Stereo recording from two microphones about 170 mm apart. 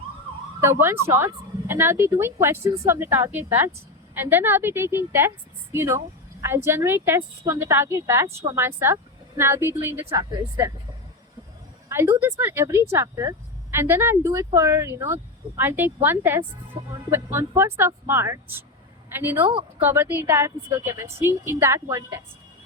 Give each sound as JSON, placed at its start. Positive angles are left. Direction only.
{"t": 0.6, "sound": "speech", "side_deg": -15}
{"t": 11.9, "sound": "speech", "side_deg": -15}